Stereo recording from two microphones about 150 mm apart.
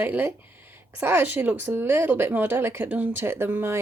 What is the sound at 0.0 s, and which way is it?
Speech, 15° right (ahead or behind).